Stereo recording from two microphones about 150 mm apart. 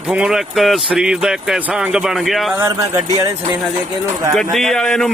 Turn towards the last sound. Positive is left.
turn(degrees=5)  # may be behind; listen again after turning